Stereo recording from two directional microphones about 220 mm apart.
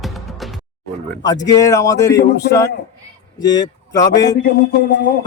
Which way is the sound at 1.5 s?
15° left (ahead or behind).